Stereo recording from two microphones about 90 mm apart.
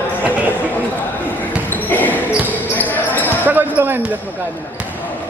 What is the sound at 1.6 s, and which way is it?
Basketball bounce, 20° left (ahead or behind).